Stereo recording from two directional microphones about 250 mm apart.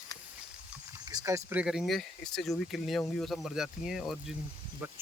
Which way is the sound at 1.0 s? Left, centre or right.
Centre.